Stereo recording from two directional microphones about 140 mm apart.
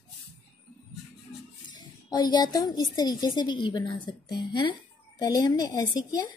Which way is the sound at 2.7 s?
30° left (ahead or behind).